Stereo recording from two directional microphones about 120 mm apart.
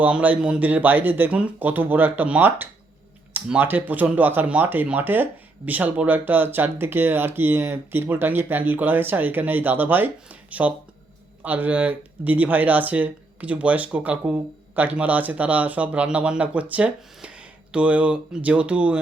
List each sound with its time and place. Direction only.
0.0 s speech: 15° right (ahead or behind)